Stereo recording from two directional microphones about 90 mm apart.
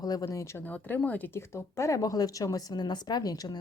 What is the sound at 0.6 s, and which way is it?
Speech, 20° left (ahead or behind).